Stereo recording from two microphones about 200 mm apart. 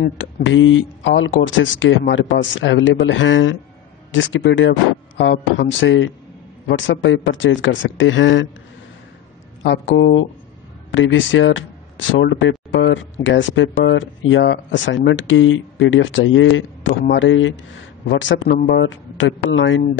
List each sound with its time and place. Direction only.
0.0 s speech: 70° left (ahead or behind)
9.6 s speech: 65° left (ahead or behind)
17.0 s speech: 65° left (ahead or behind)